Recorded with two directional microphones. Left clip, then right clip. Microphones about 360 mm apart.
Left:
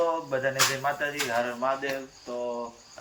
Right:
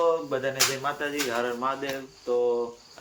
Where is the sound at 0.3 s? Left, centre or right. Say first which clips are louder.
Left 1 dB; centre.